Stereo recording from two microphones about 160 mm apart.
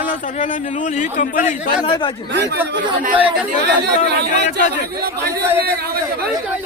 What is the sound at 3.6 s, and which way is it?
Speech, 90° right.